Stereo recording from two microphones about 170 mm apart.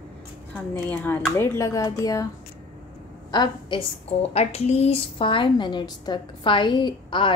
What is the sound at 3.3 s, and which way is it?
Speech, 25° left (ahead or behind).